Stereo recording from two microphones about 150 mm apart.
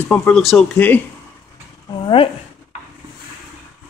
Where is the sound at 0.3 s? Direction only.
Centre (ahead or behind).